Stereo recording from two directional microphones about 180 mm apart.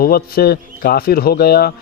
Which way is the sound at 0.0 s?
55° left (ahead or behind).